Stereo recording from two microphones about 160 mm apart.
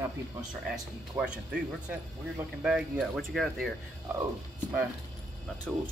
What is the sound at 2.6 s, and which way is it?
Speech, 5° right (ahead or behind).